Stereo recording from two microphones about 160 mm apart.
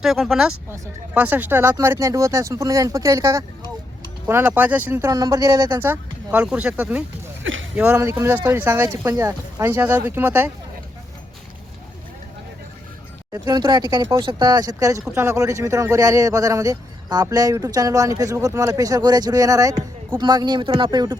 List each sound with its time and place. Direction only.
0.0 s speech: centre (ahead or behind)
13.3 s speech: 25° right (ahead or behind)